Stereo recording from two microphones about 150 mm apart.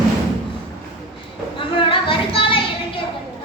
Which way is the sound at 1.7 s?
35° left (ahead or behind).